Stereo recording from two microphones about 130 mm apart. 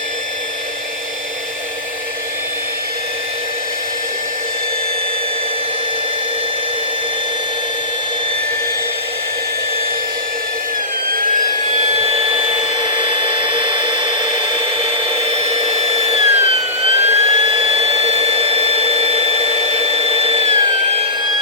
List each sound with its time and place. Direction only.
11.9 s dental drill: 50° right (ahead or behind)